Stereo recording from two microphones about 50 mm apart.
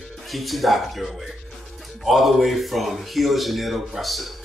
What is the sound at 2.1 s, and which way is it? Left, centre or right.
A man's voice, centre.